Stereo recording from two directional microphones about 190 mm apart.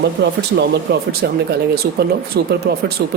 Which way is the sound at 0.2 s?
60° right (ahead or behind).